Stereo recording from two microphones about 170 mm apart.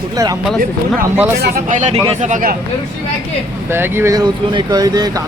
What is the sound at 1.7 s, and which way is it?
Speech, 45° right (ahead or behind).